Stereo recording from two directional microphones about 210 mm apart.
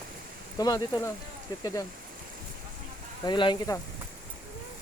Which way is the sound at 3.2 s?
20° left (ahead or behind).